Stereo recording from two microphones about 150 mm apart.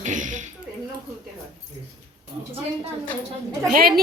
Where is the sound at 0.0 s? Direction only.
55° right (ahead or behind).